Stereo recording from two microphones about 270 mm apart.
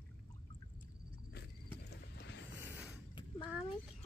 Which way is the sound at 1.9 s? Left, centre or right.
Left.